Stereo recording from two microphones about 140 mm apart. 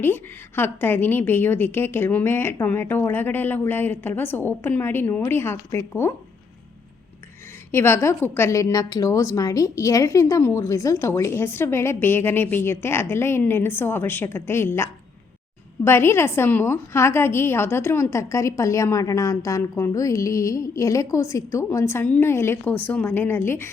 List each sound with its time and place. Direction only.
0.0 s a woman's voice: 15° left (ahead or behind)
7.7 s a woman's voice: 20° left (ahead or behind)
22.0 s a woman's voice: 10° left (ahead or behind)